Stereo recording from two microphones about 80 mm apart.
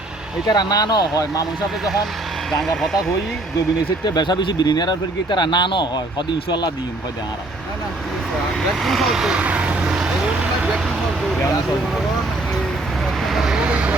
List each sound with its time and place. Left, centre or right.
0.4 s speech: left
1.8 s speech: centre
4.0 s speech: left
8.8 s speech: centre
9.4 s vehicle: centre
13.2 s vehicle: centre